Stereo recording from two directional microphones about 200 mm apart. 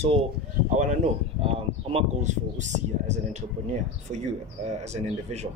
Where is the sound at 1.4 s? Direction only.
30° right (ahead or behind).